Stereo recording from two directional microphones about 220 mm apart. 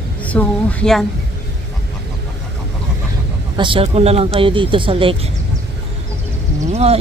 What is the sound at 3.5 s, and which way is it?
Speech, 25° right (ahead or behind).